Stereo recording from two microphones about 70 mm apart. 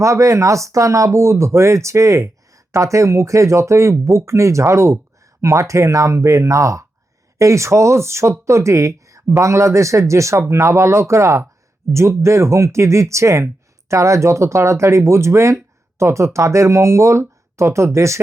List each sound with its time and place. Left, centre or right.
0.0 s speech: right